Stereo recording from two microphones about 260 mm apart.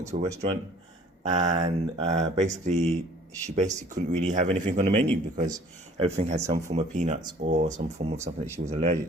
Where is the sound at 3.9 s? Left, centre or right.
Right.